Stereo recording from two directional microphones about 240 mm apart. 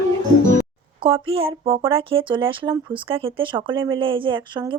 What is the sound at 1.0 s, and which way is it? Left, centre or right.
Speech, right.